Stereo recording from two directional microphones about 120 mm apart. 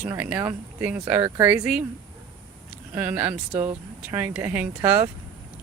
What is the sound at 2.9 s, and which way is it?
Speech, 15° right (ahead or behind).